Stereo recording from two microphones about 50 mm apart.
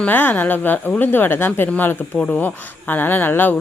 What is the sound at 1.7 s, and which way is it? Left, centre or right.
A woman's voice, left.